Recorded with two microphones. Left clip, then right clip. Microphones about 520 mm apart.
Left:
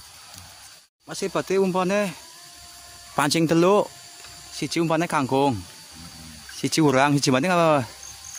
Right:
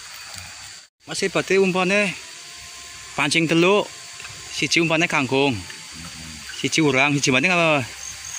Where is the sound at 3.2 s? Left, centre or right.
Left.